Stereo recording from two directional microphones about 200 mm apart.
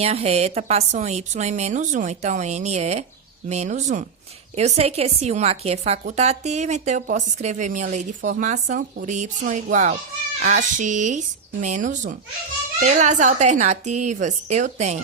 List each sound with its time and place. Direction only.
0.0 s a woman's voice: 30° right (ahead or behind)